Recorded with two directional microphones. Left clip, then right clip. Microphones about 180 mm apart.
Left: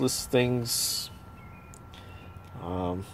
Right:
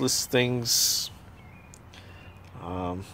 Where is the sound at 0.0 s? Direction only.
Centre (ahead or behind).